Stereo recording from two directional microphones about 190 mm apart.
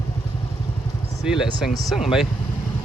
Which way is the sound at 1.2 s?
Centre (ahead or behind).